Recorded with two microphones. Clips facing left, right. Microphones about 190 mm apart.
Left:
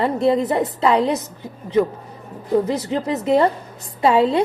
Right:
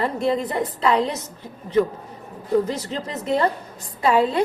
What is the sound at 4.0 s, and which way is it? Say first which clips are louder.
Speech: left 3 dB; 25° left (ahead or behind).